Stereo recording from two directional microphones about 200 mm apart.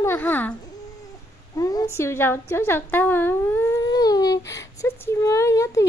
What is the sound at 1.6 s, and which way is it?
A woman's voice, 15° left (ahead or behind).